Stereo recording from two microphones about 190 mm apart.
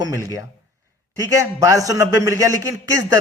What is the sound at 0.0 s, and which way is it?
Speech, 15° right (ahead or behind).